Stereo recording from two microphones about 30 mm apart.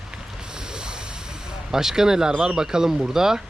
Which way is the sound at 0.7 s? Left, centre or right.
Right.